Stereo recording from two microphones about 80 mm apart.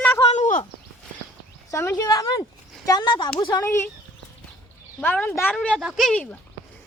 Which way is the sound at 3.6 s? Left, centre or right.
Left.